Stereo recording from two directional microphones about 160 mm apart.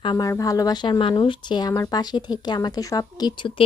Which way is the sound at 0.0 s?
25° left (ahead or behind).